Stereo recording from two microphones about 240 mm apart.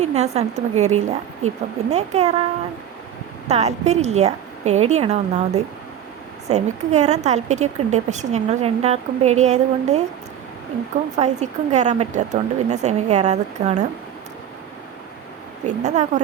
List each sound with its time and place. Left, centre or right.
0.0 s a woman's voice: right
3.4 s a woman's voice: right
11.2 s a woman's voice: right
15.6 s a woman's voice: right